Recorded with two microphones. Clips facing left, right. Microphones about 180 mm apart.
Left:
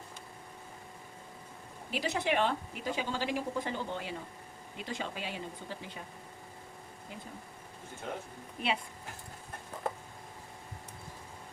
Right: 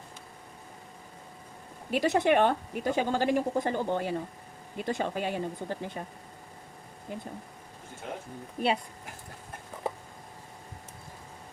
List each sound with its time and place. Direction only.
1.9 s a woman's voice: 55° right (ahead or behind)
7.1 s a woman's voice: 50° right (ahead or behind)
8.6 s speech: 40° right (ahead or behind)